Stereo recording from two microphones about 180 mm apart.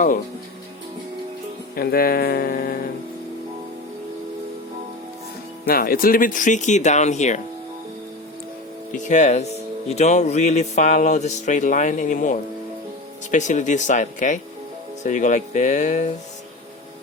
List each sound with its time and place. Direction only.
1.7 s speech: 55° left (ahead or behind)
5.6 s speech: 55° left (ahead or behind)
9.0 s speech: 40° left (ahead or behind)